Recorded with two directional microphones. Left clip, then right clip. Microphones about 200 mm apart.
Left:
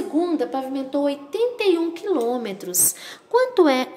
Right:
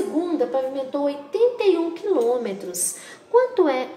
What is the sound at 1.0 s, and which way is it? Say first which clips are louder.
A woman's voice: right 2 dB; 40° left (ahead or behind).